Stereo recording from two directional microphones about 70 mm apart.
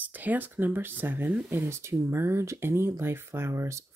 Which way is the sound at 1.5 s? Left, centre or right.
Right.